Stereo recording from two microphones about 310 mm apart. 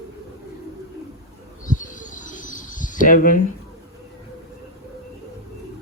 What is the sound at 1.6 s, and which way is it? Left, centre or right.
Bird, left.